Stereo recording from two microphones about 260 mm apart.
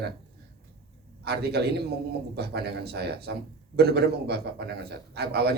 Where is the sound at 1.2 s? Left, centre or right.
Right.